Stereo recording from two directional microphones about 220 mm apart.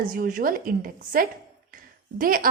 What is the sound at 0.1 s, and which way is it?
A woman's voice, 40° right (ahead or behind).